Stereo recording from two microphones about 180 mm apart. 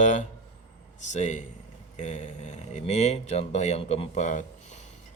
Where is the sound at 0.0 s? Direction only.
45° left (ahead or behind).